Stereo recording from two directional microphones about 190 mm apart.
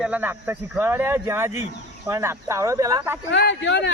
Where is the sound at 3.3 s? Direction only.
65° left (ahead or behind).